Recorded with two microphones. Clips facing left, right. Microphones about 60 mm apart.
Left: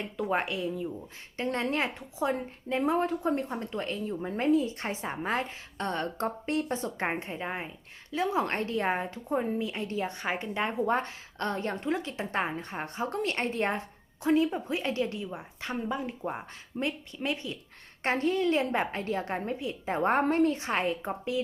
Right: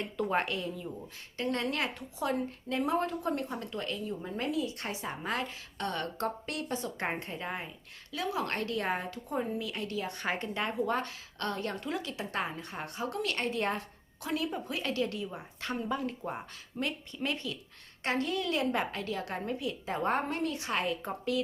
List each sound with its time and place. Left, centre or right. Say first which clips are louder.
0.0 s speech: left 1 dB; centre
1.4 s a woman's voice: left 3 dB; left
10.2 s a woman's voice: left 1 dB; centre
16.7 s a woman's voice: left 3 dB; left
17.2 s speech: even; centre
18.0 s a woman's voice: left 5 dB; left